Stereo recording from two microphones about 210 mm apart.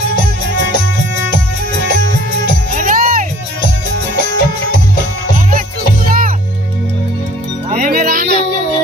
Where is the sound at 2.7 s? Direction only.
40° right (ahead or behind).